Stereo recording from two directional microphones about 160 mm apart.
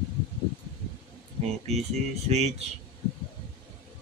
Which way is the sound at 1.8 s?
40° right (ahead or behind).